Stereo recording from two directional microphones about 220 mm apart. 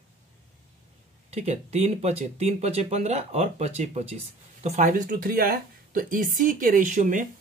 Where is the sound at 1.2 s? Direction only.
30° right (ahead or behind).